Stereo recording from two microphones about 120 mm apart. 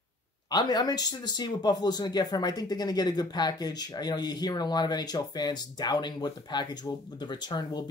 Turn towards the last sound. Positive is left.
turn(degrees=35)  # may be behind; listen again after turning